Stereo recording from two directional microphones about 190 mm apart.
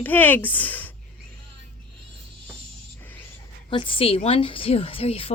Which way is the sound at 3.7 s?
30° left (ahead or behind).